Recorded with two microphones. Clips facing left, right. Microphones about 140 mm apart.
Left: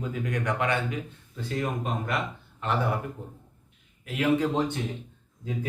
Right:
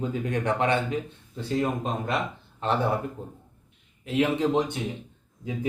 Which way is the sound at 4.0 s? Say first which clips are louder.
Right 1 dB; 25° right (ahead or behind).